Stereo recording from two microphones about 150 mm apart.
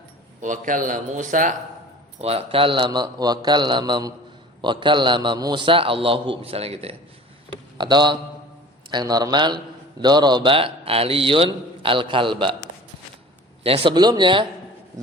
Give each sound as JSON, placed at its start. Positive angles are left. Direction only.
{"t": 0.4, "sound": "speech", "side_deg": -60}
{"t": 2.2, "sound": "a man's voice", "side_deg": -40}
{"t": 7.8, "sound": "a man's voice", "side_deg": -30}
{"t": 13.7, "sound": "a man's voice", "side_deg": -40}